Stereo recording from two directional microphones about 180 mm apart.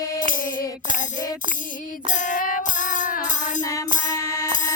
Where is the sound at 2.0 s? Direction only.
45° left (ahead or behind).